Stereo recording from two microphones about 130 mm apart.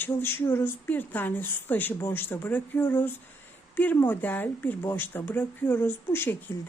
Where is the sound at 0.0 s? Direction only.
15° left (ahead or behind).